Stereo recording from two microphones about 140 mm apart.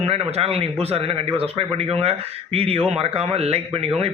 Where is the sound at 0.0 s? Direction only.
50° right (ahead or behind).